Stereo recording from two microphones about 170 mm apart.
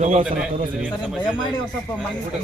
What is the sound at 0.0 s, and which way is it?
Speech, 50° right (ahead or behind).